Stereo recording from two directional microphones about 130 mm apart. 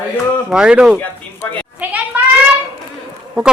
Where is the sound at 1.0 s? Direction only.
15° left (ahead or behind).